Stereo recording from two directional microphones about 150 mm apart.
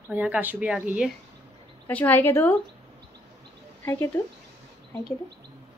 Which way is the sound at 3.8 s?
15° left (ahead or behind).